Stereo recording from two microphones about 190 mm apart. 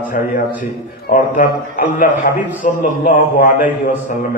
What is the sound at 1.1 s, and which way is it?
A man's voice, 45° left (ahead or behind).